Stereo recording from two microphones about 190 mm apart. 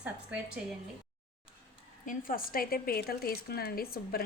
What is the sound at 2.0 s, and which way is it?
Speech, 45° left (ahead or behind).